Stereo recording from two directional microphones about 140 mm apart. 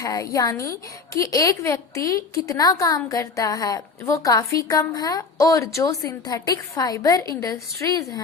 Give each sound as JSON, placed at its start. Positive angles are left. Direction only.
{"t": 0.0, "sound": "a woman's voice", "side_deg": 25}